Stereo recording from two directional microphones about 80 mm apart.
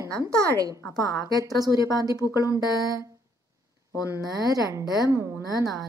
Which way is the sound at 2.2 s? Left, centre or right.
Left.